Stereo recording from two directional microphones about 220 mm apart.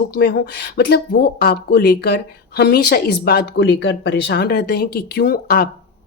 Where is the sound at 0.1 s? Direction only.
45° left (ahead or behind).